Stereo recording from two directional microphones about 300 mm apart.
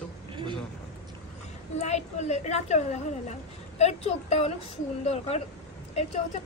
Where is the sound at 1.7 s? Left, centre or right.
Left.